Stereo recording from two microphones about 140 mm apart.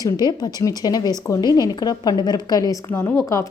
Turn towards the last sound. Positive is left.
turn(degrees=15)  # may be behind; listen again after turning